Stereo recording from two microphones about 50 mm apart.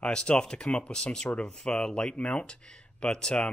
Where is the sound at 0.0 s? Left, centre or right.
Centre.